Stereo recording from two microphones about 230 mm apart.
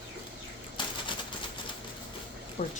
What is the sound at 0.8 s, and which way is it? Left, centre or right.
Typewriter, centre.